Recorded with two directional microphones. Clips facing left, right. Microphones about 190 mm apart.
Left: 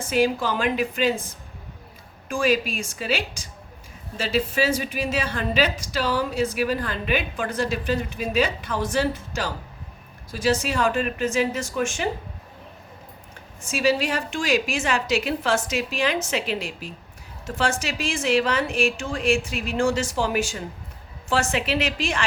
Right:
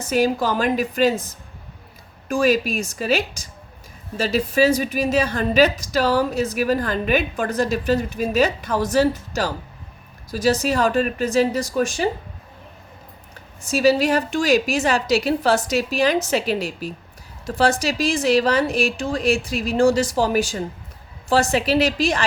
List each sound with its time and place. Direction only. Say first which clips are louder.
0.0 s a woman's voice: right 2 dB; 40° right (ahead or behind)
13.6 s a woman's voice: right 5 dB; 40° right (ahead or behind)